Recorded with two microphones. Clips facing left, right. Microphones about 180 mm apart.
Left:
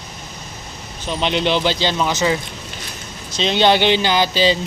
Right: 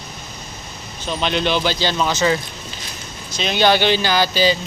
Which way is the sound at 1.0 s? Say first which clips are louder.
Left 1 dB; 20° left (ahead or behind).